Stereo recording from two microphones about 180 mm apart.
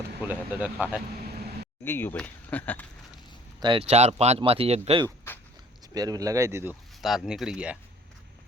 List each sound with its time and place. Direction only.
0.2 s speech: 10° right (ahead or behind)
1.8 s speech: 10° left (ahead or behind)
3.6 s speech: 30° right (ahead or behind)
5.3 s a sound: 10° left (ahead or behind)
5.9 s speech: 20° right (ahead or behind)
7.0 s speech: centre (ahead or behind)